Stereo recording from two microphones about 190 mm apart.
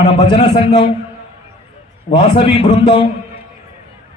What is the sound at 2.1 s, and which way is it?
Speech, 25° left (ahead or behind).